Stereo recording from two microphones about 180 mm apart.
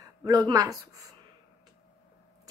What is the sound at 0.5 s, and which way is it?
Speech, 20° right (ahead or behind).